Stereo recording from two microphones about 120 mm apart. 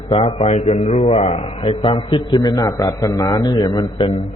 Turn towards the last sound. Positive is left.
turn(degrees=40)  # may be behind; listen again after turning